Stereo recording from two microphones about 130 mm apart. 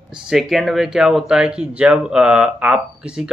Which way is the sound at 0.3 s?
5° right (ahead or behind).